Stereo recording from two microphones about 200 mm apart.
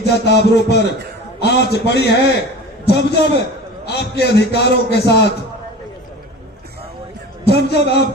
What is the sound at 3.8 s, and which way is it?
Music, 55° left (ahead or behind).